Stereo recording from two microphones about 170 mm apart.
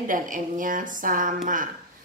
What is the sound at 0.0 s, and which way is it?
A woman's voice, 50° right (ahead or behind).